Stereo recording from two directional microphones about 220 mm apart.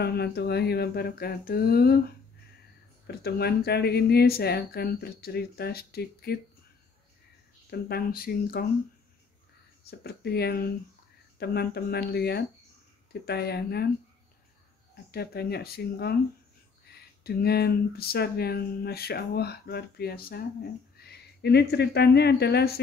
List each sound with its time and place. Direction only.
0.0 s speech: 45° left (ahead or behind)
3.1 s speech: 45° left (ahead or behind)
7.7 s speech: 45° left (ahead or behind)
9.8 s speech: 45° left (ahead or behind)
15.0 s speech: 45° left (ahead or behind)